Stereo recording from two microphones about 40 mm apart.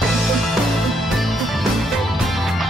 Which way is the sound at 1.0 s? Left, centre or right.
Centre.